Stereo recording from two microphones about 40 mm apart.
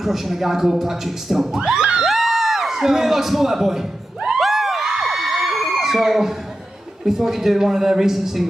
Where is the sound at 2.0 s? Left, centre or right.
Centre.